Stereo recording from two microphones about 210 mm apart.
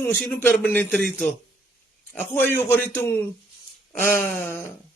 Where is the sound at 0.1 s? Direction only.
10° left (ahead or behind).